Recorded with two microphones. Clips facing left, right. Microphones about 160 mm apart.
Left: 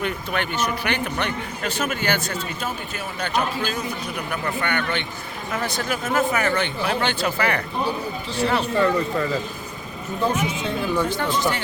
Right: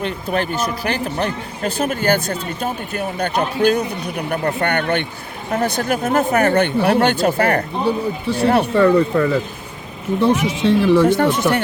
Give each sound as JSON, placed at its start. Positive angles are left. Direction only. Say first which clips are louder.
{"t": 0.0, "sound": "speech", "louder": "right 5 dB", "side_deg": -35}
{"t": 2.9, "sound": "speech", "louder": "right 4 dB", "side_deg": -55}
{"t": 4.3, "sound": "speech", "louder": "right 7 dB", "side_deg": -45}
{"t": 8.4, "sound": "speech", "louder": "right 7 dB", "side_deg": -60}
{"t": 10.2, "sound": "speech", "louder": "right 6 dB", "side_deg": -75}